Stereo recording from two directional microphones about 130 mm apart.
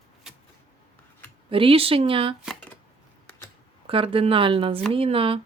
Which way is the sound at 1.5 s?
45° right (ahead or behind).